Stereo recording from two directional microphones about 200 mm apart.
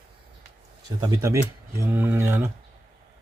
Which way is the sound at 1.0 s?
15° right (ahead or behind).